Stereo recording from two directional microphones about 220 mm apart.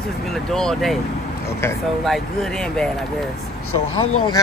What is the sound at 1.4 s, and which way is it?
Speech, 10° left (ahead or behind).